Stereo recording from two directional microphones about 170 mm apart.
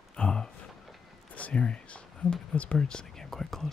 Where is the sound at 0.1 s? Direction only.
5° left (ahead or behind).